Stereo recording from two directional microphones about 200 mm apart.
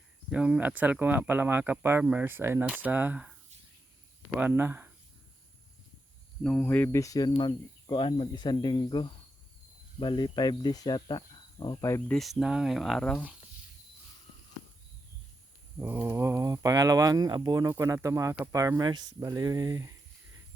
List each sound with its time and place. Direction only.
0.3 s speech: 5° right (ahead or behind)
4.4 s speech: 10° right (ahead or behind)
6.4 s speech: 5° left (ahead or behind)
12.1 s speech: centre (ahead or behind)
15.8 s speech: 15° right (ahead or behind)